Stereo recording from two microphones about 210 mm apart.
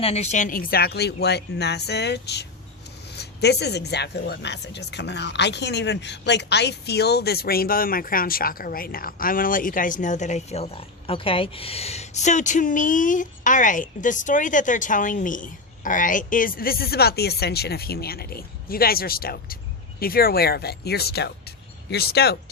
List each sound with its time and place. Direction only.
0.0 s speech: 30° left (ahead or behind); by 22.4 s 50° left (ahead or behind)